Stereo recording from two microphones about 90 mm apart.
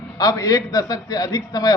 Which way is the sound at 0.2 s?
40° left (ahead or behind).